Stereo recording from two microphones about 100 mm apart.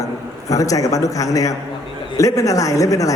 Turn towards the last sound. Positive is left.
turn(degrees=35)  # may be behind; listen again after turning